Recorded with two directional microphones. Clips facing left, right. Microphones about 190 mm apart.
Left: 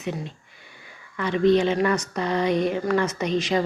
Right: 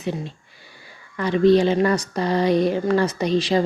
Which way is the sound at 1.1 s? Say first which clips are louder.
Right 3 dB; 35° right (ahead or behind).